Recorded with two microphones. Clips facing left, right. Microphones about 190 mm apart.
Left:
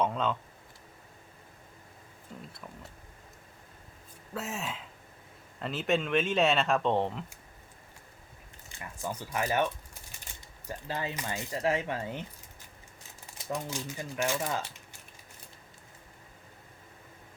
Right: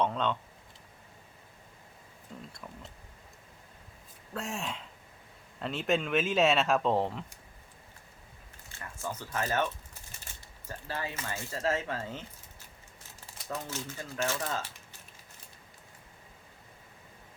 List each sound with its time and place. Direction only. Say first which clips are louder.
0.0 s speech: even; 5° left (ahead or behind)
2.3 s speech: even; 5° left (ahead or behind)
4.4 s speech: even; centre (ahead or behind)
9.0 s speech: left 2 dB; 15° left (ahead or behind)
10.7 s speech: left 2 dB; 20° left (ahead or behind)